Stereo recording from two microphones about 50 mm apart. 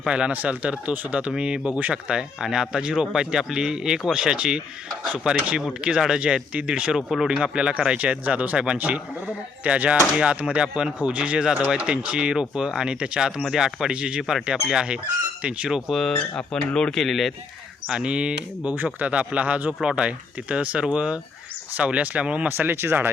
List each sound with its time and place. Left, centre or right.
0.1 s speech: right
6.9 s speech: centre
7.3 s speech: centre
13.9 s speech: centre
15.9 s speech: centre
16.1 s speech: left
17.0 s speech: centre
18.0 s speech: right
18.6 s speech: right
22.4 s speech: right